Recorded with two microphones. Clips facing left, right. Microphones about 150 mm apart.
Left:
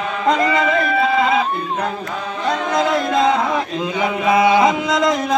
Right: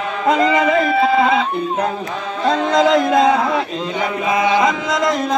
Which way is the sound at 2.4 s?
20° right (ahead or behind).